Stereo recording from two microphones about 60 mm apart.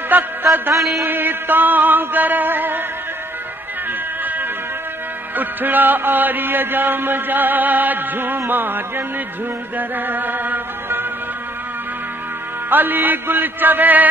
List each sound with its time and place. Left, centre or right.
0.1 s music: right
0.7 s a sound: centre
1.0 s music: right
4.2 s music: right
12.6 s music: right